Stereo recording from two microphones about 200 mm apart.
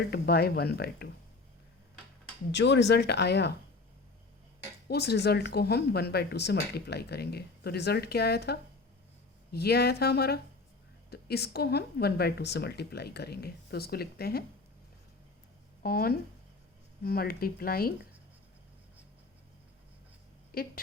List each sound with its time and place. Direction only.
0.0 s speech: 50° left (ahead or behind)
2.5 s speech: 60° left (ahead or behind)
4.9 s speech: 55° left (ahead or behind)
15.8 s speech: 50° left (ahead or behind)
20.5 s speech: 45° left (ahead or behind)